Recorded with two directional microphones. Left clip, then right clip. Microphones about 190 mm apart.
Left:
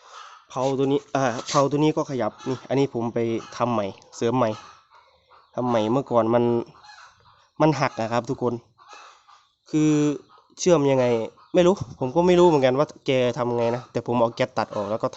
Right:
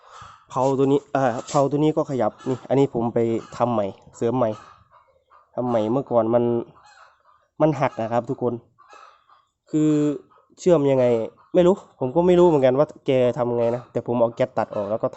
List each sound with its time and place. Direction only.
0.8 s speech: 15° right (ahead or behind); by 8.6 s 5° left (ahead or behind)
9.6 s speech: centre (ahead or behind)